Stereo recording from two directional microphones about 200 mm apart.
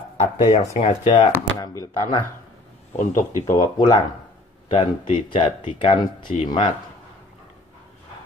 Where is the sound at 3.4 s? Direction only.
20° left (ahead or behind).